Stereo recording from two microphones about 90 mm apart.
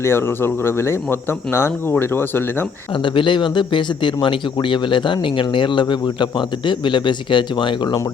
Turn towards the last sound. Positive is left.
turn(degrees=60)  # may be behind; listen again after turning